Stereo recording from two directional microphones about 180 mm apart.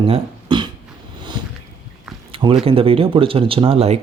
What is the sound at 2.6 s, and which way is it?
Speech, 30° right (ahead or behind).